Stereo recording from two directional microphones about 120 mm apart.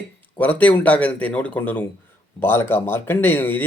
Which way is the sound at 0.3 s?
15° left (ahead or behind).